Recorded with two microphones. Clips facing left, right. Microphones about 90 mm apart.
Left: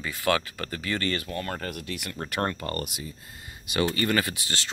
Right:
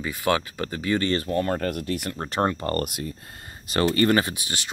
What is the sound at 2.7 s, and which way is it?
Speech, 50° right (ahead or behind).